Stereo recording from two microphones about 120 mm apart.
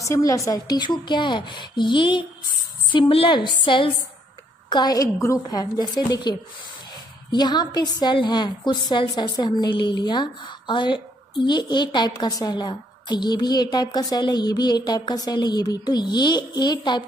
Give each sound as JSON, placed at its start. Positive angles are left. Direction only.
{"t": 0.0, "sound": "a woman's voice", "side_deg": 25}